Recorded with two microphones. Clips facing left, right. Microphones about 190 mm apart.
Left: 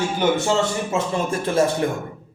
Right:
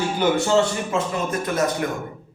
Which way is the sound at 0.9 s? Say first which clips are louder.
Left 1 dB; 30° left (ahead or behind).